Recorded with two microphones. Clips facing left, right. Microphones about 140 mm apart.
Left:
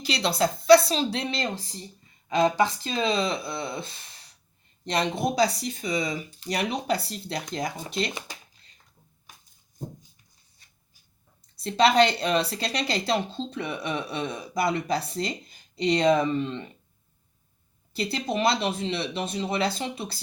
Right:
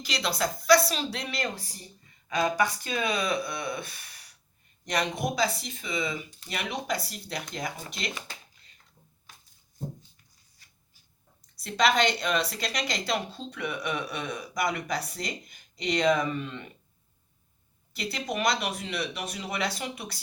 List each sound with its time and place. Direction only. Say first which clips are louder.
0.0 s a woman's voice: left 5 dB; 30° left (ahead or behind)
11.6 s a woman's voice: left 4 dB; 30° left (ahead or behind)
17.9 s a woman's voice: left 4 dB; 30° left (ahead or behind)